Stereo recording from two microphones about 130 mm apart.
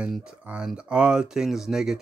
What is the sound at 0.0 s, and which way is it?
Speech, 5° right (ahead or behind).